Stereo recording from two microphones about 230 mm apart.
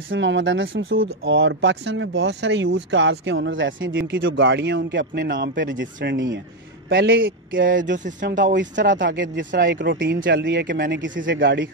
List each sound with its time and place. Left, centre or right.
0.1 s speech: right
8.7 s speech: right
9.0 s speech: right